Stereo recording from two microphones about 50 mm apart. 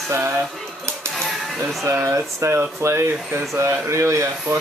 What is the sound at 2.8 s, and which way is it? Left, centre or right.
Speech, right.